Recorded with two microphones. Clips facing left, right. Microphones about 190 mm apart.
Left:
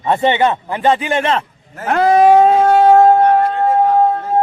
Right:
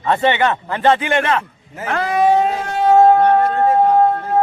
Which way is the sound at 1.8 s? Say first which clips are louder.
Left 5 dB; 50° left (ahead or behind).